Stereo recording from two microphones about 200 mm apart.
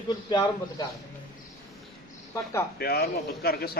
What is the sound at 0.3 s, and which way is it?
Speech, 20° left (ahead or behind).